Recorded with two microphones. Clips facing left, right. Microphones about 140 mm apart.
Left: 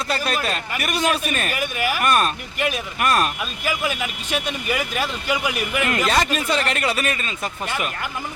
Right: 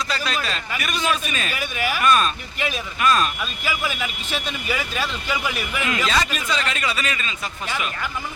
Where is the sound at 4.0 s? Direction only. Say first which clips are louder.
Left 2 dB; 10° left (ahead or behind).